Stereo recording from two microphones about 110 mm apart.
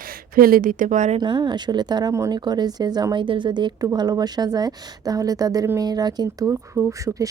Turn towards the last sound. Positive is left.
turn(degrees=-30)  # may be behind; listen again after turning